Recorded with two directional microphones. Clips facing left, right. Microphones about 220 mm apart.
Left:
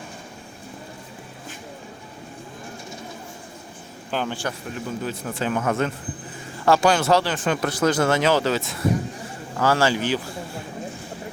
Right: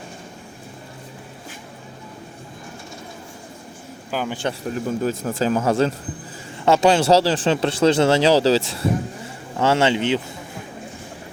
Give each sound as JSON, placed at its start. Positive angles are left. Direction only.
{"t": 4.1, "sound": "speech", "side_deg": -10}
{"t": 4.7, "sound": "speech", "side_deg": -40}